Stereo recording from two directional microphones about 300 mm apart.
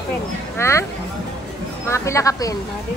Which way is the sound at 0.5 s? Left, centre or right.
Centre.